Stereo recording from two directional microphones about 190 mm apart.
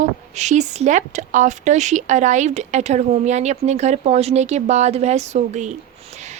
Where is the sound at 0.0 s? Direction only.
40° right (ahead or behind).